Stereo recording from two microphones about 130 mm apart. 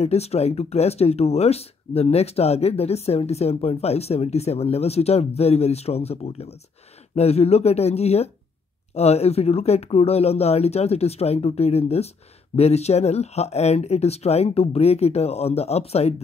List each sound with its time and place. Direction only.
0.0 s speech: 55° left (ahead or behind)